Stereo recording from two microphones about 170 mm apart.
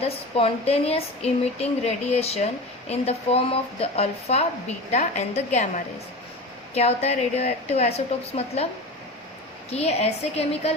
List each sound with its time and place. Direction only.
0.0 s a woman's voice: 35° left (ahead or behind)
9.6 s speech: 40° left (ahead or behind)